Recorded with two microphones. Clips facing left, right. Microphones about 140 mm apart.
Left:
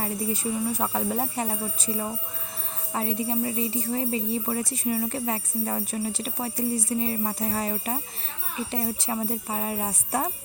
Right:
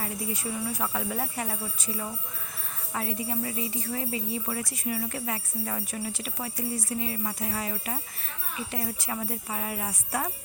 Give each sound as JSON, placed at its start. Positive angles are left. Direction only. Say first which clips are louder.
{"t": 0.0, "sound": "jingle bell", "louder": "left 5 dB", "side_deg": 30}